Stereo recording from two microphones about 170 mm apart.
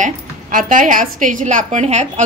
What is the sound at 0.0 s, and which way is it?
A woman's voice, 50° right (ahead or behind).